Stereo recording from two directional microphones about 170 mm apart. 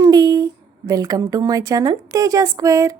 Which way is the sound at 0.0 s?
20° right (ahead or behind).